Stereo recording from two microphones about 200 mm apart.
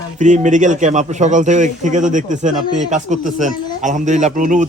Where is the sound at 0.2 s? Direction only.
40° right (ahead or behind).